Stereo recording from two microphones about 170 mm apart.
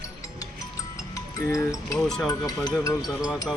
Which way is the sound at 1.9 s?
Centre (ahead or behind).